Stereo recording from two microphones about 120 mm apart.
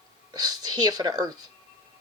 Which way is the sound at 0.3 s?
35° right (ahead or behind).